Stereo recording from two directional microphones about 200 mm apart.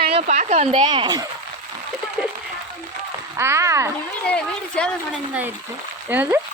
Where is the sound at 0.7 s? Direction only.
25° right (ahead or behind).